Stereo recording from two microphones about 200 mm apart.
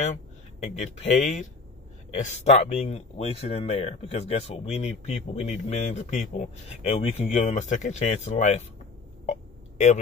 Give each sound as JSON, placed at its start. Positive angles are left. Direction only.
{"t": 0.6, "sound": "speech", "side_deg": 35}
{"t": 9.2, "sound": "hiccup", "side_deg": 35}